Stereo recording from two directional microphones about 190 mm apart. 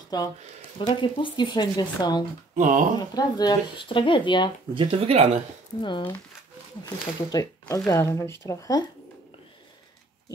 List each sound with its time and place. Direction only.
0.1 s speech: 20° left (ahead or behind)
2.5 s speech: 40° right (ahead or behind)
3.0 s speech: 20° left (ahead or behind)
4.7 s speech: 30° right (ahead or behind)
5.8 s speech: 25° left (ahead or behind)
7.6 s speech: 15° left (ahead or behind)